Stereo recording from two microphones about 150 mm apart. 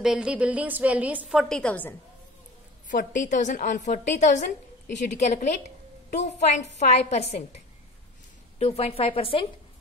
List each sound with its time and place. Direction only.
0.0 s a woman's voice: 5° right (ahead or behind)
2.9 s a woman's voice: 60° left (ahead or behind); by 7.4 s 45° left (ahead or behind)
8.5 s a woman's voice: 40° left (ahead or behind)